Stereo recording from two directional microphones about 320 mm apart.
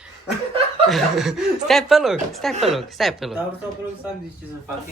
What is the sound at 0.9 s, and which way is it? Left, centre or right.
Speech, centre.